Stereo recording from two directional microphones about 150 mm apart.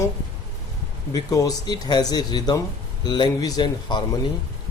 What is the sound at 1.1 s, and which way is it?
Speech, 25° left (ahead or behind).